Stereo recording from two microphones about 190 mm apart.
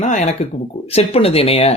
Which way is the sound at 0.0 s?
40° left (ahead or behind).